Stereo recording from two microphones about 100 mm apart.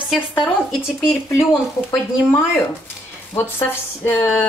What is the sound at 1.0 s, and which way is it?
Speech, 25° left (ahead or behind).